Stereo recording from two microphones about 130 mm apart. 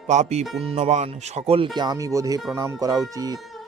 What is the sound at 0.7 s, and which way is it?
Speech, 60° right (ahead or behind).